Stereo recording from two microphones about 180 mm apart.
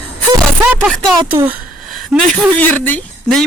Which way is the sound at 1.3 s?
10° right (ahead or behind).